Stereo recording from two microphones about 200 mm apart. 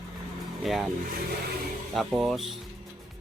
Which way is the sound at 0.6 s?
Centre (ahead or behind).